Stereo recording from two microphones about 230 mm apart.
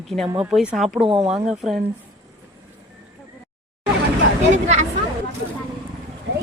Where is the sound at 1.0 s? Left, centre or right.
Right.